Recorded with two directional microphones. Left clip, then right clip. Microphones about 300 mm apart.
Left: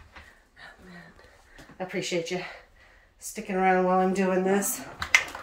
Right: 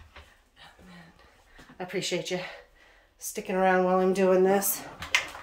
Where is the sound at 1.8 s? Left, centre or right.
Centre.